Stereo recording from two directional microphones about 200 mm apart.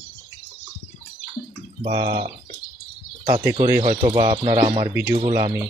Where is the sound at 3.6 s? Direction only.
20° right (ahead or behind).